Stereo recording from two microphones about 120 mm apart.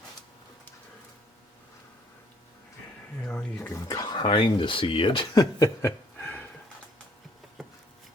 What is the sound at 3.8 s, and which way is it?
Speech, 35° left (ahead or behind).